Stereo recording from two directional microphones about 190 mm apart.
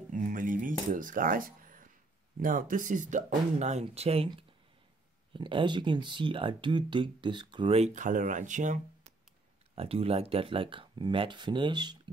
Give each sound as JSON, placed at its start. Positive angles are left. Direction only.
{"t": 0.1, "sound": "cutlery", "side_deg": -45}
{"t": 2.4, "sound": "speech", "side_deg": -45}
{"t": 9.8, "sound": "speech", "side_deg": -30}